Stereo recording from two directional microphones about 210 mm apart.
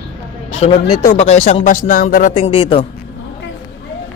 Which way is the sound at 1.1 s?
30° left (ahead or behind).